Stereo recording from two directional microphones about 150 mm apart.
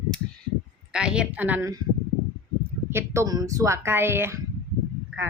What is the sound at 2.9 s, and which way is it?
A woman's voice, 20° right (ahead or behind).